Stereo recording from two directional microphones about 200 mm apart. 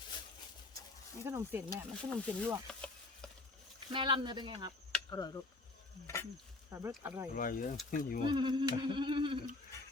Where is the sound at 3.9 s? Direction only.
25° right (ahead or behind).